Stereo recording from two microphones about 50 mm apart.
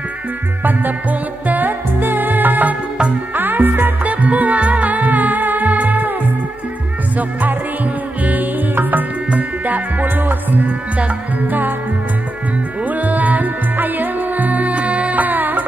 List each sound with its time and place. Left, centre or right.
1.5 s music: right
12.8 s music: right